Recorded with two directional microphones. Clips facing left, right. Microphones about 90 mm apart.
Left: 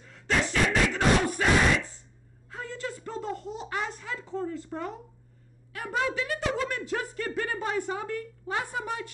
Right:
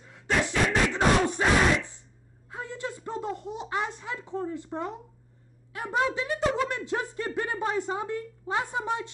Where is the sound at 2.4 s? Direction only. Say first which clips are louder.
Right 1 dB; 20° right (ahead or behind).